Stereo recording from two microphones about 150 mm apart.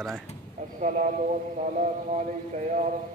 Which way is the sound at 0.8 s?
55° right (ahead or behind).